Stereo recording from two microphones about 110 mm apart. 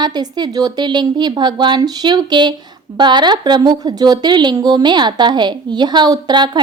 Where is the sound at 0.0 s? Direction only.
40° right (ahead or behind).